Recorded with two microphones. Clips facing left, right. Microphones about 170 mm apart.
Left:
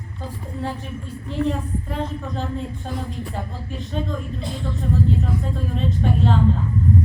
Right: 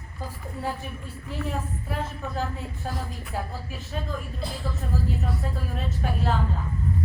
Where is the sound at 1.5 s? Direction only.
5° right (ahead or behind).